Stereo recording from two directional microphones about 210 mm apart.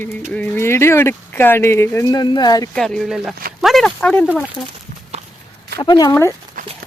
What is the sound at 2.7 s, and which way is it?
Speech, 5° left (ahead or behind).